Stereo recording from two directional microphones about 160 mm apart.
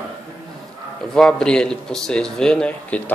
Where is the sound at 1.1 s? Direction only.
5° left (ahead or behind).